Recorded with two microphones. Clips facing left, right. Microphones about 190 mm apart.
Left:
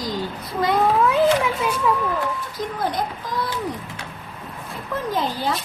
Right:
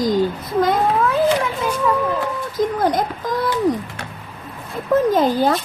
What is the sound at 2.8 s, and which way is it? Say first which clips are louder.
Speech: right 6 dB; 45° right (ahead or behind).